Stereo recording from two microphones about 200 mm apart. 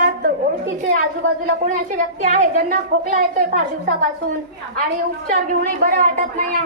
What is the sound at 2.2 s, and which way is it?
A woman's voice, 40° right (ahead or behind).